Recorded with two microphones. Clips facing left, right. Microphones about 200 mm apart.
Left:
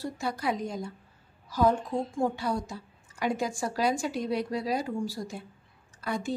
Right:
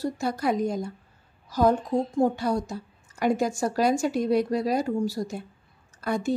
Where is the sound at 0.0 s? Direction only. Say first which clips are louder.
Right 5 dB; 45° right (ahead or behind).